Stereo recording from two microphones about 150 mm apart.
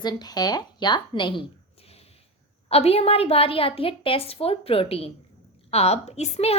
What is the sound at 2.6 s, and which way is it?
A woman's voice, 40° left (ahead or behind).